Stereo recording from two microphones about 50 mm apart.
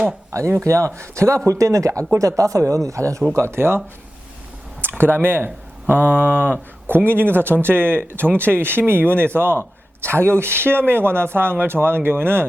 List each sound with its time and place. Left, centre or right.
0.3 s speech: right
1.5 s speech: right
3.3 s speech: right
4.8 s speech: right